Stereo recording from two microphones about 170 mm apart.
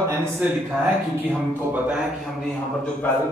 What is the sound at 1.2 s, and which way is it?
A man's voice, 10° right (ahead or behind).